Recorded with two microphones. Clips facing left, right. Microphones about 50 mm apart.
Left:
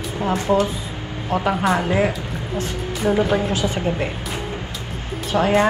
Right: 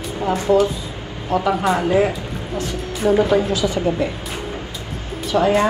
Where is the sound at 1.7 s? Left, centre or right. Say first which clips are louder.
Right 2 dB; left.